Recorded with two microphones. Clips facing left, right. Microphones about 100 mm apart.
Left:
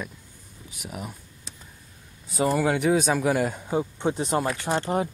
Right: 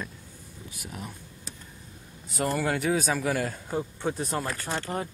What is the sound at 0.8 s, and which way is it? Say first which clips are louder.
Speech: left 4 dB; 5° left (ahead or behind).